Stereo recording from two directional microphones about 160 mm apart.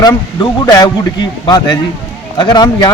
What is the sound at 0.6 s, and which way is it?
A man's voice, 25° left (ahead or behind).